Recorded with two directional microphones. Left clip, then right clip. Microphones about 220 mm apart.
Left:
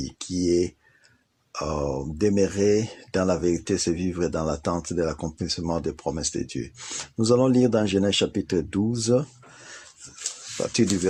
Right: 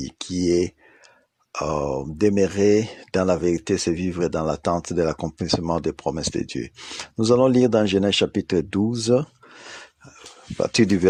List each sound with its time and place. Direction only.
0.0 s speech: 35° right (ahead or behind)
10.6 s speech: 35° right (ahead or behind)